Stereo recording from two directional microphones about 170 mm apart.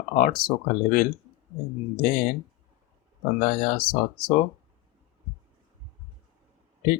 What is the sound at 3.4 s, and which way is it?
Speech, 60° left (ahead or behind).